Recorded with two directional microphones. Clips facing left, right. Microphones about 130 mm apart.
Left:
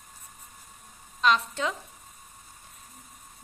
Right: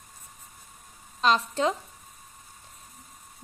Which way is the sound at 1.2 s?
35° right (ahead or behind).